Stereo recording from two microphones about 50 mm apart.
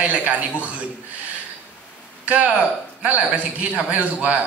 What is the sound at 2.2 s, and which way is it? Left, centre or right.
A man's voice, right.